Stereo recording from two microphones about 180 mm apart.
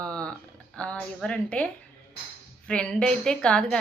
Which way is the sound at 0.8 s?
5° left (ahead or behind).